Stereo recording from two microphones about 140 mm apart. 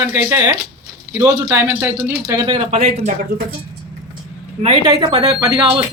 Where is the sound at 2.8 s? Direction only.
90° right.